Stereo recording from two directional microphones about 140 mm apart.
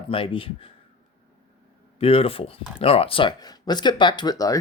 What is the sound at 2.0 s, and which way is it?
Speech, 45° left (ahead or behind).